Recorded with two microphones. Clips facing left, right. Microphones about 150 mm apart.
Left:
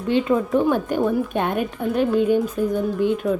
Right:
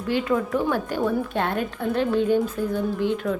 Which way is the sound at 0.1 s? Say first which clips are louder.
Left 4 dB; 20° left (ahead or behind).